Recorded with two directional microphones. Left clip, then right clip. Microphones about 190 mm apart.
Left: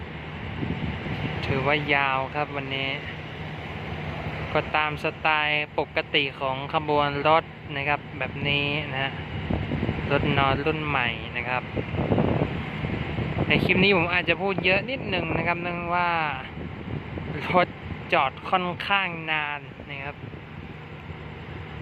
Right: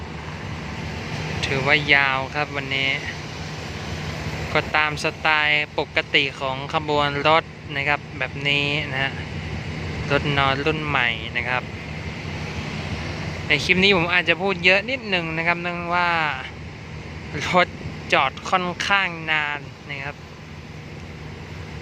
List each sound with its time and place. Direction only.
1.4 s speech: centre (ahead or behind)
4.5 s speech: centre (ahead or behind)
13.5 s speech: centre (ahead or behind)